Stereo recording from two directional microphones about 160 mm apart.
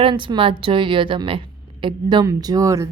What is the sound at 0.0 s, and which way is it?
A woman's voice, 30° right (ahead or behind).